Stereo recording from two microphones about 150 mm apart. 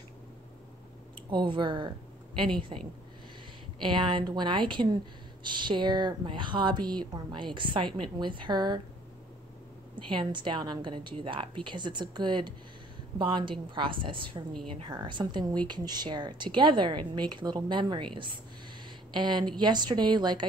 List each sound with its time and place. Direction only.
1.3 s speech: 30° right (ahead or behind)
3.8 s speech: 30° right (ahead or behind)
10.0 s a woman's voice: 30° right (ahead or behind)